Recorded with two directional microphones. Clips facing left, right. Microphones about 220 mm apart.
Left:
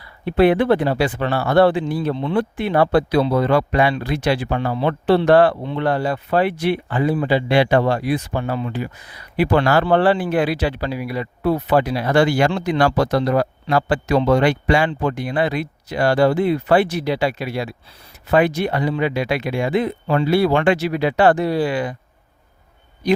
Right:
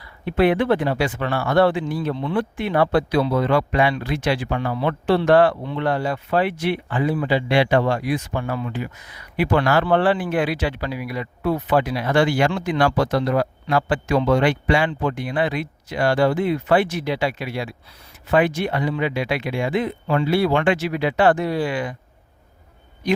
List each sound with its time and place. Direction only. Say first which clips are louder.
0.0 s speech: left 3 dB; 30° left (ahead or behind)